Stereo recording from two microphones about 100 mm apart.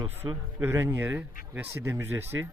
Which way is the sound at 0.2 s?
50° right (ahead or behind).